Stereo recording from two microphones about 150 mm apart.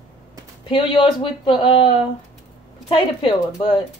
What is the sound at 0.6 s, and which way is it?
A woman's voice, 35° left (ahead or behind).